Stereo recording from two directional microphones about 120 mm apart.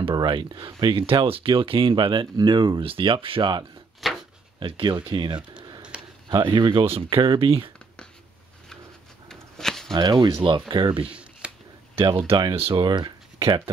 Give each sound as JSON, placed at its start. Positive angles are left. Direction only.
{"t": 0.1, "sound": "speech", "side_deg": -35}
{"t": 4.0, "sound": "a sound", "side_deg": 0}
{"t": 4.6, "sound": "speech", "side_deg": -45}
{"t": 5.6, "sound": "a sound", "side_deg": -40}
{"t": 6.5, "sound": "speech", "side_deg": -45}
{"t": 9.3, "sound": "a sound", "side_deg": 5}
{"t": 9.9, "sound": "speech", "side_deg": -35}
{"t": 11.1, "sound": "shuffling cards", "side_deg": -10}
{"t": 11.9, "sound": "speech", "side_deg": -50}